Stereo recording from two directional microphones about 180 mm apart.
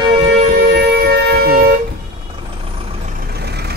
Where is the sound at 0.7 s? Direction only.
60° right (ahead or behind).